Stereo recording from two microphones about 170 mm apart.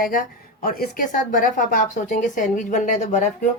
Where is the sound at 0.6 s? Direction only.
60° left (ahead or behind).